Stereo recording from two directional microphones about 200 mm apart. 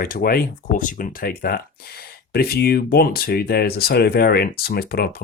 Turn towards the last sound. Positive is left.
turn(degrees=50)  # may be behind; listen again after turning